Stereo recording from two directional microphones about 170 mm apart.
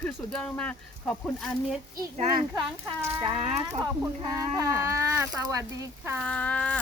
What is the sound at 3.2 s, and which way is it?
Speech, 35° right (ahead or behind).